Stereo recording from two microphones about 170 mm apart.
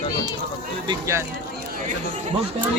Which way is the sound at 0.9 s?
15° right (ahead or behind).